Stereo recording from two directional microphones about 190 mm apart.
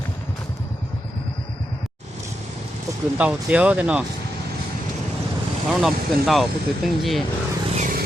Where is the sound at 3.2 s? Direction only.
5° right (ahead or behind).